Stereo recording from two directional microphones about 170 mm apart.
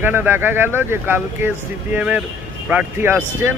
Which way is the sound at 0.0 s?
10° right (ahead or behind).